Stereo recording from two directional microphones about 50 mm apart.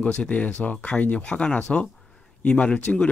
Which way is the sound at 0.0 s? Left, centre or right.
Left.